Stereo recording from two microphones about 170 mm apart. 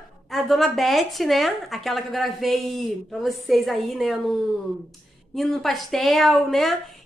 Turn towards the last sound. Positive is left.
turn(degrees=0)  # may be behind; listen again after turning